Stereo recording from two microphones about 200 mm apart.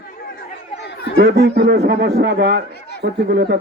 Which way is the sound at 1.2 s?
60° right (ahead or behind).